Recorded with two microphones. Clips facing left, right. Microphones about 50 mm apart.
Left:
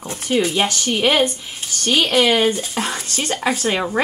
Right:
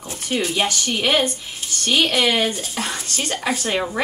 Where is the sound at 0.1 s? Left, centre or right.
Left.